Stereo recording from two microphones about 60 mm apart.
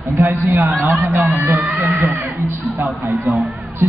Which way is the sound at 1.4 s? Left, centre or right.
Right.